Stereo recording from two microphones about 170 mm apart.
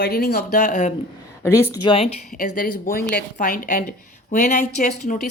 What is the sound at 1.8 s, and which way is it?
Speech, 35° left (ahead or behind).